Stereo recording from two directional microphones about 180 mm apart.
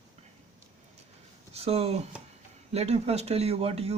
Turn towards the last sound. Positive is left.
turn(degrees=-35)  # may be behind; listen again after turning